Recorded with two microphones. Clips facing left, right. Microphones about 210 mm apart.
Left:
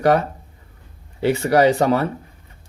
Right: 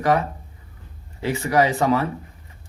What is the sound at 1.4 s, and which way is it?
Speech, 35° left (ahead or behind).